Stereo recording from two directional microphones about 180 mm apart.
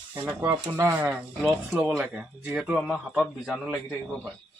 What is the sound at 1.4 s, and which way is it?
Speech, centre (ahead or behind).